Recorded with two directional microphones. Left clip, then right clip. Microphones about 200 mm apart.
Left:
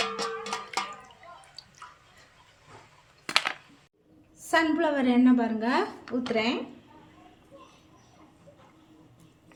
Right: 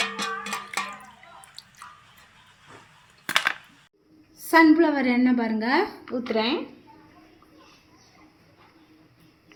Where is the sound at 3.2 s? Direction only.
15° right (ahead or behind).